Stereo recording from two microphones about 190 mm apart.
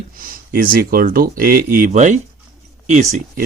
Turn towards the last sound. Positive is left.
turn(degrees=-40)  # may be behind; listen again after turning